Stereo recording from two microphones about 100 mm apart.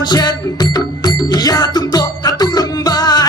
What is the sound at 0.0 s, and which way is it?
Music, 45° left (ahead or behind).